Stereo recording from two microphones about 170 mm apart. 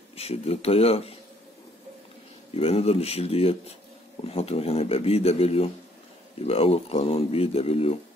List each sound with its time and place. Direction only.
0.1 s speech: 35° left (ahead or behind)
2.5 s speech: 35° left (ahead or behind)